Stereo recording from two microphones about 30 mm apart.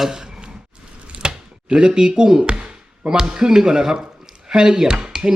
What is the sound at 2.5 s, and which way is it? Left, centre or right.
Speech, right.